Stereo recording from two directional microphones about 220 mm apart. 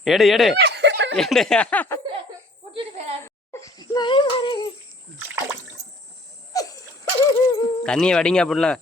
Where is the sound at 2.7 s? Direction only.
25° right (ahead or behind).